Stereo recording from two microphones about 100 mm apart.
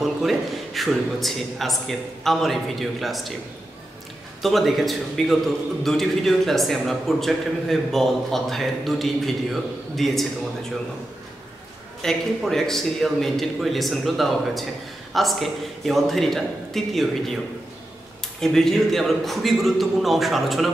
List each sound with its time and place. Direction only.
0.0 s a man's voice: centre (ahead or behind)
4.4 s a man's voice: centre (ahead or behind)
12.0 s a man's voice: 5° left (ahead or behind)
18.4 s a man's voice: 5° left (ahead or behind)